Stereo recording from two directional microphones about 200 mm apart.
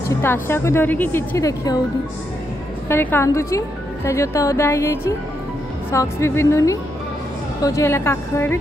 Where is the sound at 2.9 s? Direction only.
10° left (ahead or behind).